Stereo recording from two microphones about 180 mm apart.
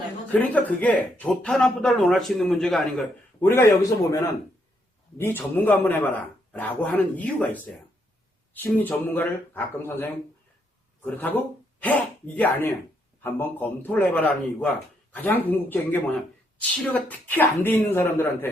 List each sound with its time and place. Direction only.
0.3 s speech: 10° left (ahead or behind)
3.4 s a man's voice: 15° left (ahead or behind)